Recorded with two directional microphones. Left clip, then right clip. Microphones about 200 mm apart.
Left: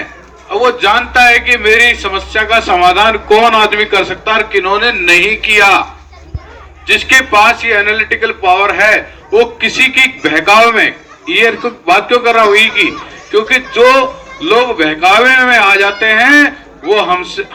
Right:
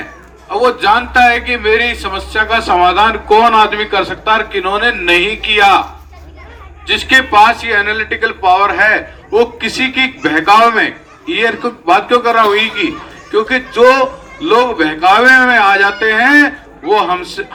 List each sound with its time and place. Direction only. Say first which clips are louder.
0.5 s a man's voice: left 1 dB; 45° left (ahead or behind)
6.8 s a man's voice: left 2 dB; 50° left (ahead or behind)